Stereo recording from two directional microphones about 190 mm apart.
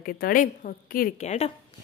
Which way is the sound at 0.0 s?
45° left (ahead or behind).